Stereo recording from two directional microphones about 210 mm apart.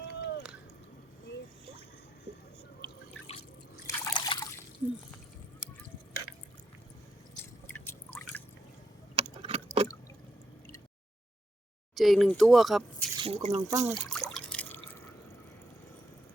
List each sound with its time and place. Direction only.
0.1 s drip: 50° left (ahead or behind)
3.8 s liquid: 20° left (ahead or behind)
7.7 s drip: 5° left (ahead or behind)
9.1 s keys jangling: 25° right (ahead or behind)
9.8 s drip: 30° right (ahead or behind)
11.9 s speech: centre (ahead or behind)
13.1 s speech: 25° right (ahead or behind)
13.7 s speech: 15° right (ahead or behind)
13.9 s drip: centre (ahead or behind)